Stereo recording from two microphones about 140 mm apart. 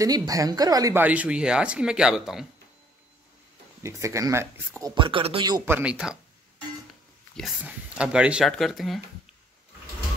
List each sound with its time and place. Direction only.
0.0 s speech: 25° right (ahead or behind)
0.9 s speech: 10° right (ahead or behind)
3.8 s speech: 20° right (ahead or behind)
4.9 s speech: 35° right (ahead or behind)
5.7 s speech: 15° right (ahead or behind)
7.3 s speech: centre (ahead or behind)